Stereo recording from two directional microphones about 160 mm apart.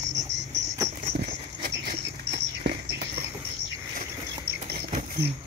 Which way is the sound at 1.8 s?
80° right.